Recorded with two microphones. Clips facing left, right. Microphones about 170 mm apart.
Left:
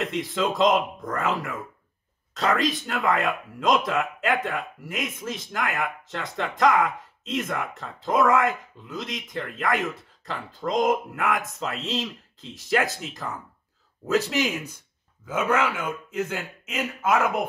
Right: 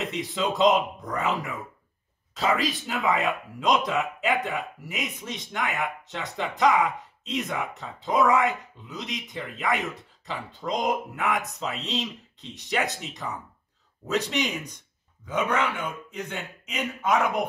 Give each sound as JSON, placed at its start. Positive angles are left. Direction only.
{"t": 0.0, "sound": "speech", "side_deg": 0}